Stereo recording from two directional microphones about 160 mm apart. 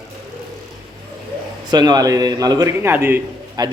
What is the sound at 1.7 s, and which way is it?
A man's voice, 25° right (ahead or behind).